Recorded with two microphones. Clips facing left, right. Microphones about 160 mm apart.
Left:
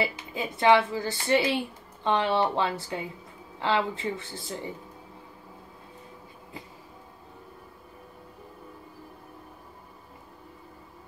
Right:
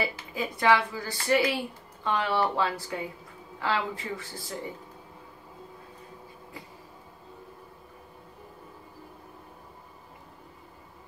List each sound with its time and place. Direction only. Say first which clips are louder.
0.0 s a woman's voice: left 1 dB; 25° left (ahead or behind)